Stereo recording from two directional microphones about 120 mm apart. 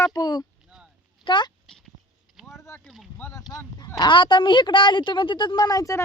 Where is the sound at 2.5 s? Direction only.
20° left (ahead or behind).